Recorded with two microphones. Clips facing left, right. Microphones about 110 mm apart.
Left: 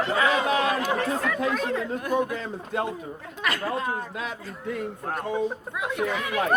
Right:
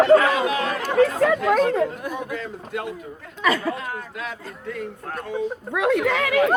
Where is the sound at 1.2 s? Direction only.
75° right (ahead or behind).